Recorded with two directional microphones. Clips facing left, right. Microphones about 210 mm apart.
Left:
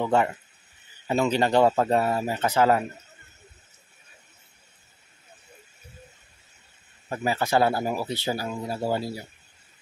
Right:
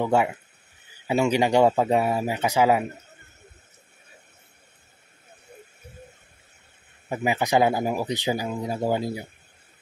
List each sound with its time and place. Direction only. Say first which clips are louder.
0.0 s speech: right 1 dB; 10° right (ahead or behind)
7.1 s speech: right 2 dB; 15° right (ahead or behind)